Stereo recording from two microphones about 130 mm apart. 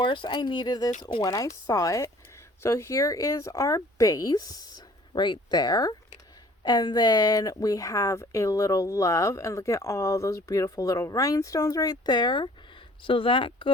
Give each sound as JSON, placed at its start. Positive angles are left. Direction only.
{"t": 0.0, "sound": "speech", "side_deg": 40}